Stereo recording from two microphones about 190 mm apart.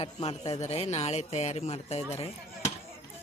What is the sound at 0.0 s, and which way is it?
Speech, 35° left (ahead or behind).